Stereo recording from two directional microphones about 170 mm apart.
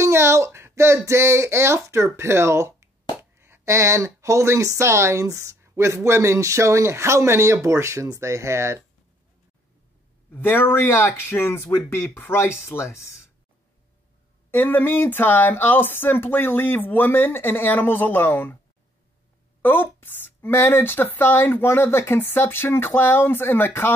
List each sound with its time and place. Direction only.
0.0 s speech: 15° right (ahead or behind)
10.3 s speech: 10° left (ahead or behind)
14.5 s speech: 10° left (ahead or behind)
19.6 s speech: 10° left (ahead or behind)